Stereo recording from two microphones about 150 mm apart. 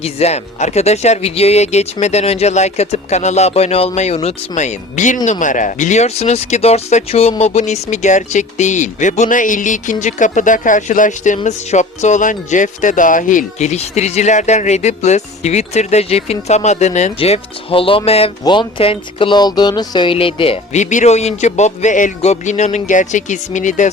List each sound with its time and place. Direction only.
0.0 s speech: 45° left (ahead or behind)
18.4 s speech: 30° left (ahead or behind)
20.9 s speech: 50° left (ahead or behind)